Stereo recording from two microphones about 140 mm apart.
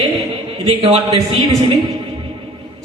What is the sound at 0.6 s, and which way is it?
A man's voice, 45° right (ahead or behind).